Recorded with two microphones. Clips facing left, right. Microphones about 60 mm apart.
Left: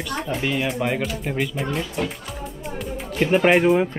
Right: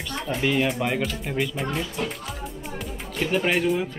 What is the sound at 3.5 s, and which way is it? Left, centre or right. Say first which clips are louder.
Speech: left 6 dB; left.